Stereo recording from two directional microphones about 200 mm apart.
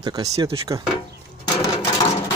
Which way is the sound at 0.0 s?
20° right (ahead or behind).